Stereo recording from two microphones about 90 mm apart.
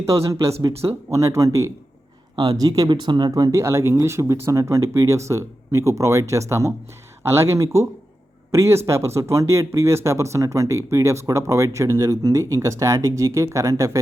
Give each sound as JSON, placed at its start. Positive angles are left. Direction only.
{"t": 0.0, "sound": "speech", "side_deg": -35}
{"t": 2.3, "sound": "speech", "side_deg": -70}
{"t": 2.6, "sound": "speech", "side_deg": -45}
{"t": 2.9, "sound": "speech", "side_deg": -60}